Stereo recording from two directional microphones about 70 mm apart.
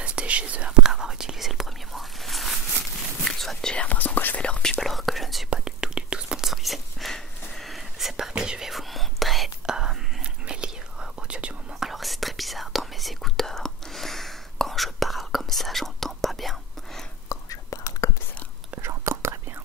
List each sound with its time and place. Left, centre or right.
0.0 s whispering: centre
3.7 s whispering: left; by 5.5 s centre
5.5 s whispering: centre
9.7 s whispering: centre
11.8 s whispering: centre
17.3 s whispering: left
18.8 s whispering: right